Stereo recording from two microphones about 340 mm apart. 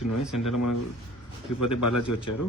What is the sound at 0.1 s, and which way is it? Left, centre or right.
A man's voice, left.